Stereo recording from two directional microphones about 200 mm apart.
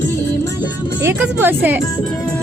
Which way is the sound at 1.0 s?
10° right (ahead or behind).